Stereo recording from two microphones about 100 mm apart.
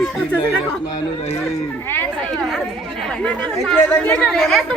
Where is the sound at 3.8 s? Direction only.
20° left (ahead or behind).